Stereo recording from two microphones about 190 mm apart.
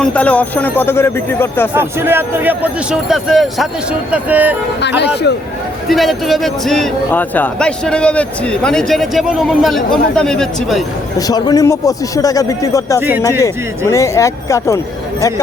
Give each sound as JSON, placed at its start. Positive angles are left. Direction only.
{"t": 0.0, "sound": "a man's voice", "side_deg": 5}
{"t": 1.7, "sound": "speech", "side_deg": -10}
{"t": 4.8, "sound": "speech", "side_deg": 65}
{"t": 5.9, "sound": "a man's voice", "side_deg": 0}
{"t": 11.3, "sound": "a man's voice", "side_deg": 20}
{"t": 13.0, "sound": "speech", "side_deg": -10}
{"t": 13.4, "sound": "a man's voice", "side_deg": 15}